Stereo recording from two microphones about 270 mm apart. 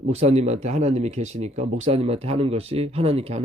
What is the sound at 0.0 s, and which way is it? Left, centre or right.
Speech, right.